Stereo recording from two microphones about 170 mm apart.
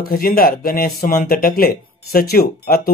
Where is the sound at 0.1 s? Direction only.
60° left (ahead or behind).